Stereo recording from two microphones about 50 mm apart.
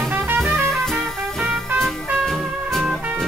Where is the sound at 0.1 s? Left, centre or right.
Right.